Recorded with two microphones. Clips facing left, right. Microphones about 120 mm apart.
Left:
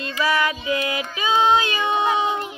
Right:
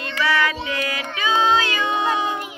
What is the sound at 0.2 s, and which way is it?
Child singing, 25° left (ahead or behind).